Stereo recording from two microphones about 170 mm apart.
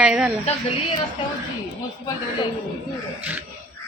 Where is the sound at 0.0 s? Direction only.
5° right (ahead or behind).